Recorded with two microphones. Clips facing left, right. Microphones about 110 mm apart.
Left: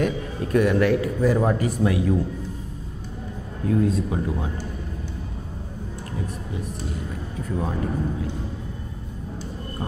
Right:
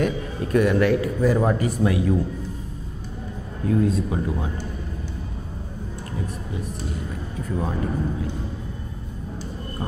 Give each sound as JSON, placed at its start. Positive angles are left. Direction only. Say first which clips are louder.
{"t": 0.0, "sound": "a man's voice", "louder": "even", "side_deg": -20}
{"t": 3.7, "sound": "a man's voice", "louder": "even", "side_deg": -25}
{"t": 7.5, "sound": "a man's voice", "louder": "even", "side_deg": -25}